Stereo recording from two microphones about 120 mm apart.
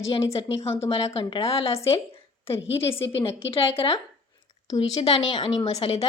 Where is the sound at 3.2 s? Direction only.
50° left (ahead or behind).